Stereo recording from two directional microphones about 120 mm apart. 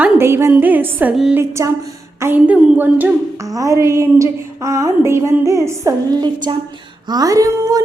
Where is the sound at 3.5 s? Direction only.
25° right (ahead or behind).